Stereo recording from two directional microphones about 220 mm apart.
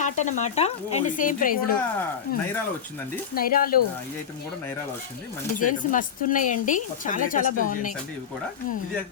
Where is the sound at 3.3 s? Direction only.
40° left (ahead or behind).